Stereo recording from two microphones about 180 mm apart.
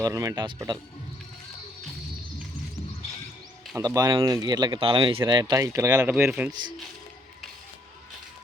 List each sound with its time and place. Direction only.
0.0 s speech: 20° right (ahead or behind)
3.8 s speech: 20° right (ahead or behind)